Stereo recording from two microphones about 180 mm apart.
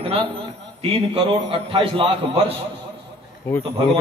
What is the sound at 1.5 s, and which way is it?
A man's voice, 30° right (ahead or behind).